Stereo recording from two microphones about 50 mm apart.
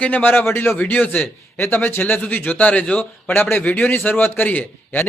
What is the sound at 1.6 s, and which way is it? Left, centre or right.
A man's voice, left.